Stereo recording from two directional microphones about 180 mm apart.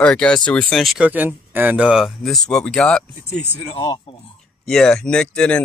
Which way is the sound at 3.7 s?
25° left (ahead or behind).